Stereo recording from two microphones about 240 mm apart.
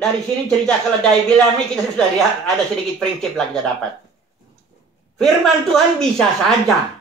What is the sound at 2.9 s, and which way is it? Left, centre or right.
Speech, centre.